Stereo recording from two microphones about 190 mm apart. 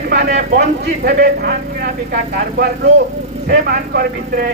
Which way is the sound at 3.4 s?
50° right (ahead or behind).